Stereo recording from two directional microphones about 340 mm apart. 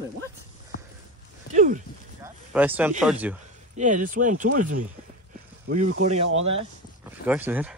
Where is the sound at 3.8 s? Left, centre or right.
Right.